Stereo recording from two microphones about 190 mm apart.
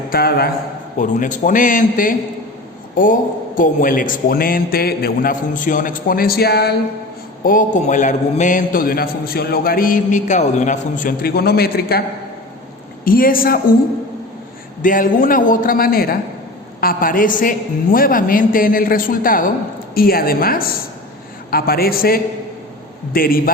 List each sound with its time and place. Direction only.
0.1 s a man's voice: 55° left (ahead or behind)
0.9 s a man's voice: 40° left (ahead or behind); by 6.7 s 60° left (ahead or behind)
7.4 s a man's voice: 45° left (ahead or behind)
13.1 s a man's voice: 50° left (ahead or behind)
14.8 s a man's voice: 45° left (ahead or behind)